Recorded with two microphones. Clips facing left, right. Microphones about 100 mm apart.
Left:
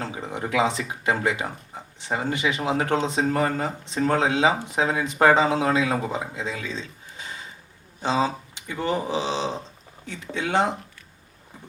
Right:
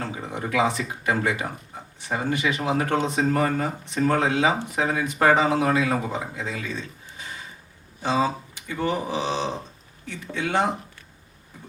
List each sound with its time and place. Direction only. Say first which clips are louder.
0.0 s speech: even; 20° left (ahead or behind)
8.0 s speech: even; 20° left (ahead or behind)